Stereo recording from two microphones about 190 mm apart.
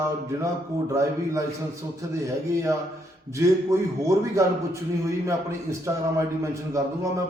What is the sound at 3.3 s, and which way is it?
A man's voice, 15° right (ahead or behind).